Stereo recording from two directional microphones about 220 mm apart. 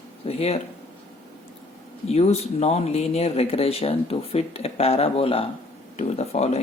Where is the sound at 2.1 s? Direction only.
30° left (ahead or behind).